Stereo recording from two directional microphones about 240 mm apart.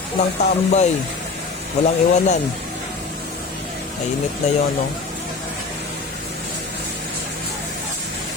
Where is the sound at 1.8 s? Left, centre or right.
Left.